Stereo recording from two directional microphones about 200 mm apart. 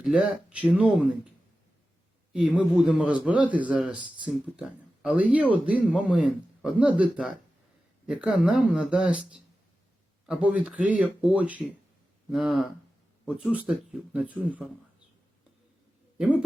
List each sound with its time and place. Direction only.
0.0 s a man's voice: 5° right (ahead or behind)
2.3 s a man's voice: 5° right (ahead or behind)